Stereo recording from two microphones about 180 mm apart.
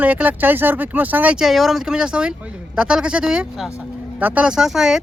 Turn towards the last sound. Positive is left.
turn(degrees=0)  # may be behind; listen again after turning